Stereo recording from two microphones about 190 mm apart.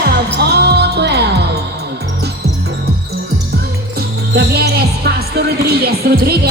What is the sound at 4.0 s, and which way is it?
Music, 55° right (ahead or behind).